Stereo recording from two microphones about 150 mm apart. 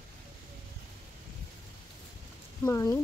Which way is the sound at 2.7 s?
20° left (ahead or behind).